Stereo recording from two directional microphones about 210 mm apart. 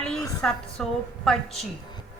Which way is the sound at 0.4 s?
5° left (ahead or behind).